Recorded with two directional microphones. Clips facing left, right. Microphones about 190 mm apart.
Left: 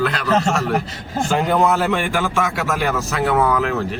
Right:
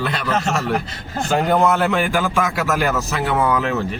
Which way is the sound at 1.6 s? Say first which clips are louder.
Right 1 dB; centre (ahead or behind).